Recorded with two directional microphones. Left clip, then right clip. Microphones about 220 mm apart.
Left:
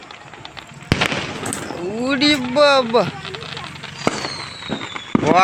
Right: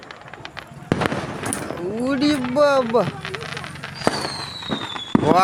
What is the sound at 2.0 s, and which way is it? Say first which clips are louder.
Speech: left 4 dB; centre (ahead or behind).